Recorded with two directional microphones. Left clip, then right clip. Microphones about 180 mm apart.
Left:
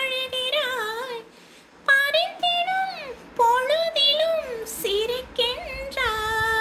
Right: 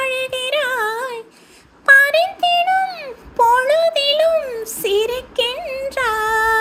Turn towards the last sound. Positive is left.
turn(degrees=-40)  # may be behind; listen again after turning